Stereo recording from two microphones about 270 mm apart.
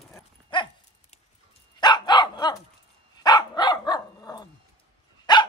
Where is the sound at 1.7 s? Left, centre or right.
Centre.